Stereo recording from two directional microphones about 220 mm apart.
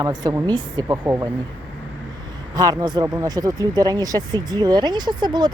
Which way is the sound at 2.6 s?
20° right (ahead or behind).